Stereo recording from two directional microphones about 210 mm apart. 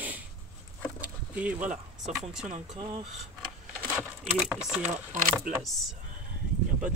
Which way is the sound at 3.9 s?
Centre (ahead or behind).